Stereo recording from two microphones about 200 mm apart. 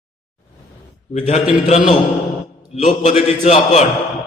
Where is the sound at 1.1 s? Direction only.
35° left (ahead or behind).